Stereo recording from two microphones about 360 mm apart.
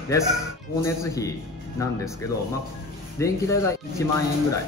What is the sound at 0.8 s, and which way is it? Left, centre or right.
Speech, centre.